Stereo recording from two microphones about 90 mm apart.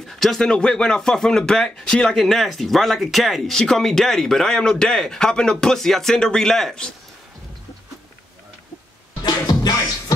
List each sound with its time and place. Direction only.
0.2 s speech: 5° left (ahead or behind)
9.2 s music: 45° left (ahead or behind)